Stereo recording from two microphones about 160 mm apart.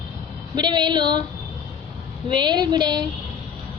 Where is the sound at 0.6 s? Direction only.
25° right (ahead or behind).